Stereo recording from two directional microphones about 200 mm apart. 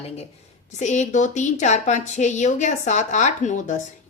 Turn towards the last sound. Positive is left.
turn(degrees=35)  # may be behind; listen again after turning